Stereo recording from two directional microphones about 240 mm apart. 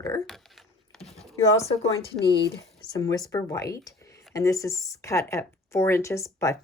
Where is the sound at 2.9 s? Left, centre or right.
Centre.